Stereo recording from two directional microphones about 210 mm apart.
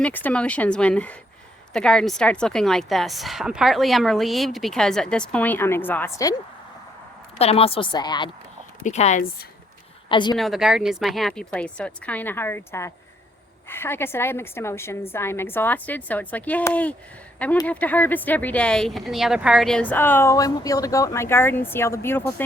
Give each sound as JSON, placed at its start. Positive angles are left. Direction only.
{"t": 0.0, "sound": "a woman's voice", "side_deg": 10}
{"t": 7.3, "sound": "a woman's voice", "side_deg": 30}
{"t": 8.8, "sound": "speech", "side_deg": 35}
{"t": 10.1, "sound": "speech", "side_deg": 20}
{"t": 10.3, "sound": "a woman's voice", "side_deg": 0}